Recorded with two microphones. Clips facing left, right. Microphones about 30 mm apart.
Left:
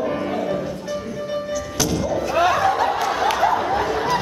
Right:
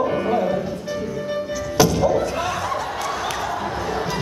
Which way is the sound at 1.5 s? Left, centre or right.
Centre.